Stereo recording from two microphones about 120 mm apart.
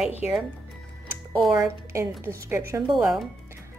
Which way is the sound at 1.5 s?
25° right (ahead or behind).